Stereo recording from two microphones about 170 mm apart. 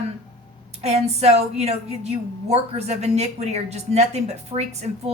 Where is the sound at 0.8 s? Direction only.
40° right (ahead or behind).